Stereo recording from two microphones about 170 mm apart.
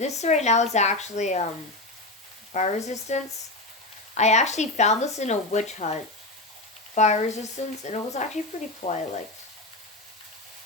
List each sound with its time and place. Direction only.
0.0 s speech: 40° left (ahead or behind)
2.5 s speech: 40° left (ahead or behind)